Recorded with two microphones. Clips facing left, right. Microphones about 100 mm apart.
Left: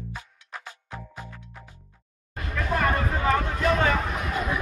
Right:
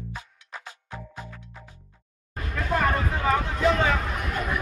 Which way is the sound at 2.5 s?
5° right (ahead or behind).